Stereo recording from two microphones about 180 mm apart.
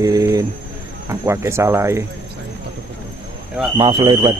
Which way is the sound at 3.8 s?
25° right (ahead or behind).